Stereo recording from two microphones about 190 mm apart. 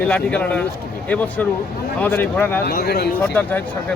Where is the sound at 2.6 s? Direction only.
55° left (ahead or behind).